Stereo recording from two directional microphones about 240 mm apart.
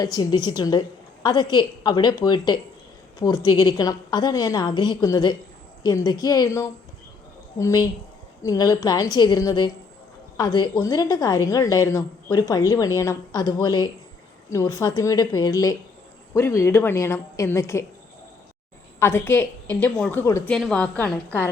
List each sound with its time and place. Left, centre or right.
0.0 s a woman's voice: centre
18.9 s a woman's voice: centre